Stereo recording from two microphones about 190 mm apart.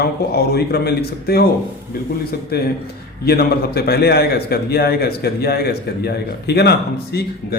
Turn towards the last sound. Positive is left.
turn(degrees=60)  # may be behind; listen again after turning